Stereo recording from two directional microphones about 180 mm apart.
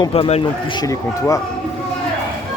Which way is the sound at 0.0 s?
30° left (ahead or behind).